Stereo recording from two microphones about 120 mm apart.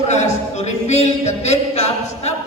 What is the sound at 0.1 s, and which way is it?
A man's voice, 75° left (ahead or behind).